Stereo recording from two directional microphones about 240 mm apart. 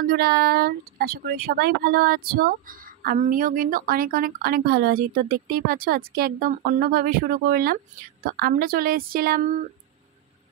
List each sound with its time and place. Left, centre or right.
0.1 s speech: right